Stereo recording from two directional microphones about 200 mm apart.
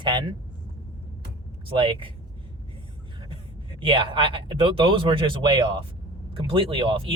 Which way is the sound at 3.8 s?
25° right (ahead or behind).